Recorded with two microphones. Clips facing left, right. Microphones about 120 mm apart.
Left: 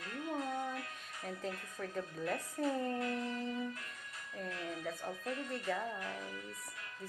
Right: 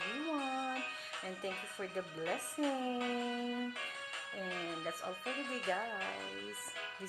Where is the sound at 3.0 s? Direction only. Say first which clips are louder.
Even; 90° right.